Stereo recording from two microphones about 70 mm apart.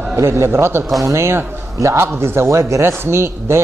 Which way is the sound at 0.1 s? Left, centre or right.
Right.